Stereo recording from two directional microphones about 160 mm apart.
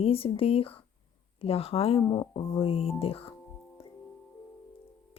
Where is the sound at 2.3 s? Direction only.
35° left (ahead or behind).